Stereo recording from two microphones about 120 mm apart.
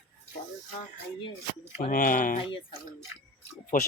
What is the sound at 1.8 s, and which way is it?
Speech, 90° left.